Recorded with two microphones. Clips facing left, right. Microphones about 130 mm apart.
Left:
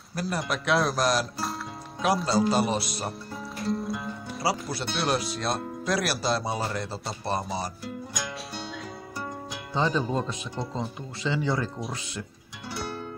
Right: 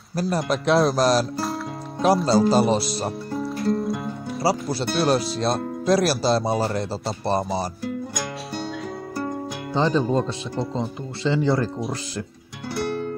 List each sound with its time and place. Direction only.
0.1 s speech: 30° right (ahead or behind)
2.2 s speech: 30° right (ahead or behind)
3.3 s music: centre (ahead or behind)
4.4 s speech: 30° right (ahead or behind)
7.8 s music: 50° right (ahead or behind)
9.8 s speech: 30° right (ahead or behind)
12.7 s music: 60° right (ahead or behind)